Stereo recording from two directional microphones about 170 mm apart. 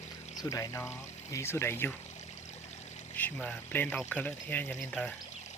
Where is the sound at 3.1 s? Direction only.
10° left (ahead or behind).